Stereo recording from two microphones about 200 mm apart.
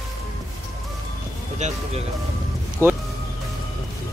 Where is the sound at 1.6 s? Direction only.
35° right (ahead or behind).